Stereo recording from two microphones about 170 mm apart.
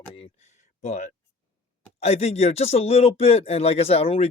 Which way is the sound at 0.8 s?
45° left (ahead or behind).